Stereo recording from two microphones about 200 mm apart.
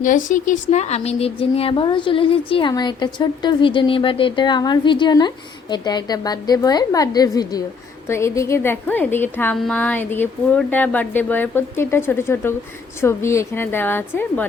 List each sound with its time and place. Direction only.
0.0 s a woman's voice: 40° left (ahead or behind); by 14.4 s 10° left (ahead or behind)